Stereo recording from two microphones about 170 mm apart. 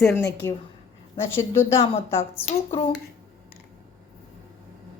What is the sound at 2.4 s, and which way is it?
Speech, 30° left (ahead or behind).